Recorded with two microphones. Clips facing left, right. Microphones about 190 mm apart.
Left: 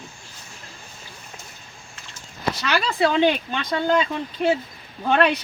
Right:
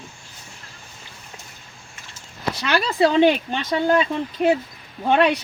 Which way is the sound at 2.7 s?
30° right (ahead or behind).